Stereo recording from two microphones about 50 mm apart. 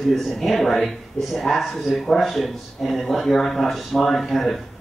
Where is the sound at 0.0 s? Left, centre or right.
Centre.